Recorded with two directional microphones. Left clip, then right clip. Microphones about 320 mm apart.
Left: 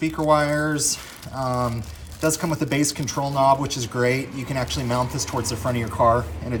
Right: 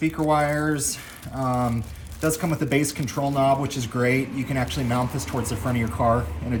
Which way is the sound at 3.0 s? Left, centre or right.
Centre.